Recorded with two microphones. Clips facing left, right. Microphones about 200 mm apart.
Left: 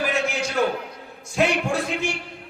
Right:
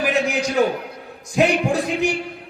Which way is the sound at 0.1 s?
15° right (ahead or behind).